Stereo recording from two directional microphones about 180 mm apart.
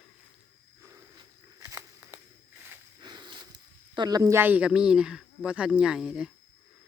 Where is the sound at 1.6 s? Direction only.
15° right (ahead or behind).